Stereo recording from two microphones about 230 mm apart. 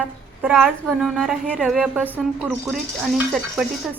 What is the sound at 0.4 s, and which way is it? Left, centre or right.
A woman's voice, centre.